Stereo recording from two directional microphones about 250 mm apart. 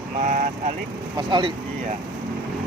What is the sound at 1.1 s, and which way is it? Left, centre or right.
Speech, centre.